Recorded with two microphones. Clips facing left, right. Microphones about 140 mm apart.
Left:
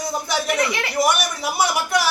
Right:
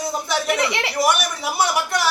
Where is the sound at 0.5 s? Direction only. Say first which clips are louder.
Even; 25° right (ahead or behind).